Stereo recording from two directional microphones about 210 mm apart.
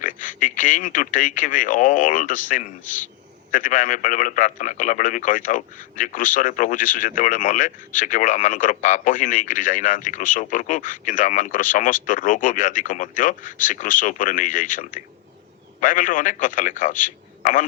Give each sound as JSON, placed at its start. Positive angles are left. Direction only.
{"t": 0.0, "sound": "a man's voice", "side_deg": 40}
{"t": 3.5, "sound": "a man's voice", "side_deg": 40}